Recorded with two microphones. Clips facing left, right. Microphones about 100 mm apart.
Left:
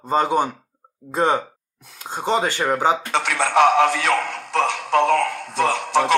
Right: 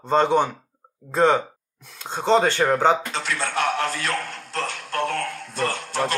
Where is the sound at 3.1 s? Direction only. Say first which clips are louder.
Left 7 dB; 75° left (ahead or behind).